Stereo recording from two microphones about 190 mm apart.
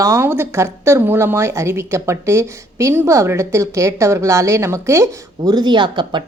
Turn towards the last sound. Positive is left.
turn(degrees=-25)  # may be behind; listen again after turning